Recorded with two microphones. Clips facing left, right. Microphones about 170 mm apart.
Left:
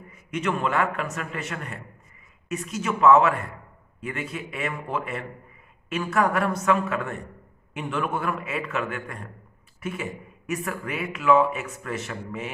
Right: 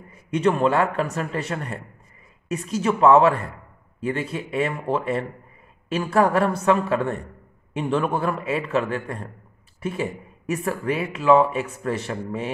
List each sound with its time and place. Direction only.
0.1 s speech: 35° right (ahead or behind)